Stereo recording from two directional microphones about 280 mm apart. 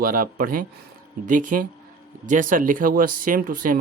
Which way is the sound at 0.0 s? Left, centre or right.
Right.